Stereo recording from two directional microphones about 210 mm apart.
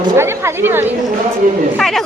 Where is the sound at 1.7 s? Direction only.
Centre (ahead or behind).